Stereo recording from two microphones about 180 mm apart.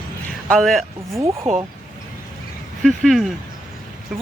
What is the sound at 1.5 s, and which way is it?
Speech, 40° right (ahead or behind).